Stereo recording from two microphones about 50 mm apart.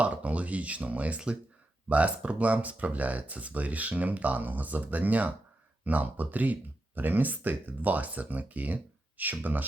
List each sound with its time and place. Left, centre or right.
0.0 s speech: right